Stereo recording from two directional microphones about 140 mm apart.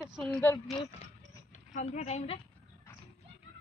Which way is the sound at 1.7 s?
60° left (ahead or behind).